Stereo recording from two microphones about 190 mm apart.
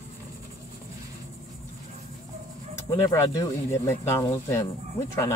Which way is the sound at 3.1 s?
15° left (ahead or behind).